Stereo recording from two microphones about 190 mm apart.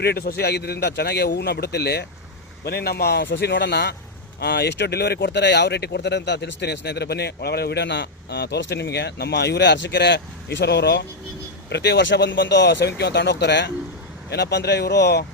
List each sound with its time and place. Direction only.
0.0 s speech: 55° left (ahead or behind)